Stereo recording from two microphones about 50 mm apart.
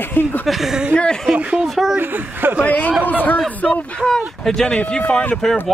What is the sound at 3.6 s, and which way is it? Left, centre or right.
Speech, centre.